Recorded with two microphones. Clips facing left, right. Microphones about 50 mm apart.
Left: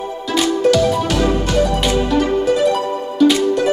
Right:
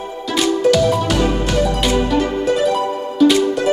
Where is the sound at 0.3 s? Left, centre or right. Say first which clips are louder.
Even; centre.